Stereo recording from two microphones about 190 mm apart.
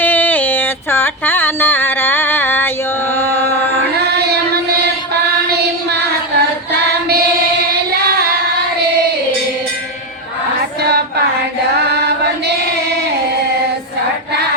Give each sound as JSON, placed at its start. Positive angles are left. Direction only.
{"t": 0.0, "sound": "music", "side_deg": 10}
{"t": 3.2, "sound": "chant", "side_deg": 10}
{"t": 11.9, "sound": "a sound", "side_deg": -60}